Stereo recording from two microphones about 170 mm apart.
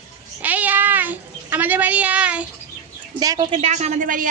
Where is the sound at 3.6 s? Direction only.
40° right (ahead or behind).